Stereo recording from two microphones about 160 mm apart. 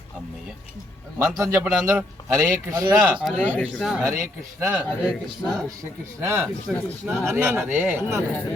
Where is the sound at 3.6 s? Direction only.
Centre (ahead or behind).